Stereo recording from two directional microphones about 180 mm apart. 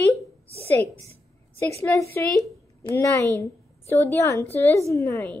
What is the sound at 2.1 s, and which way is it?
A woman's voice, 10° left (ahead or behind).